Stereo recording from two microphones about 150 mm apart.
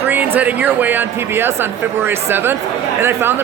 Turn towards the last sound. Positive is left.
turn(degrees=-15)  # may be behind; listen again after turning